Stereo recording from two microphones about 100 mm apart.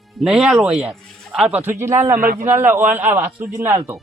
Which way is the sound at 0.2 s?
5° right (ahead or behind).